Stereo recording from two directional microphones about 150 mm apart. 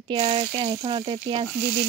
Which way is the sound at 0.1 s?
30° right (ahead or behind).